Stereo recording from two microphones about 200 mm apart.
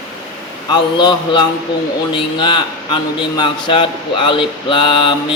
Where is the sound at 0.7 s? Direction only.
20° left (ahead or behind).